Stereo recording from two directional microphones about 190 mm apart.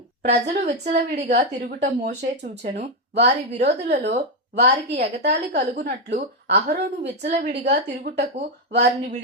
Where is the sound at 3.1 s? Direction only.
60° right (ahead or behind).